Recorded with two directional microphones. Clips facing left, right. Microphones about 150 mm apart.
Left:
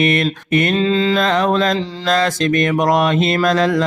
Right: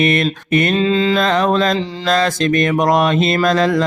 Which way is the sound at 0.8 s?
15° right (ahead or behind).